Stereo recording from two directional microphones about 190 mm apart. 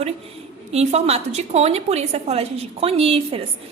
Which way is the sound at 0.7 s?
35° right (ahead or behind).